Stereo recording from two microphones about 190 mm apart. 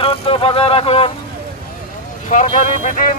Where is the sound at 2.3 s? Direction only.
40° left (ahead or behind).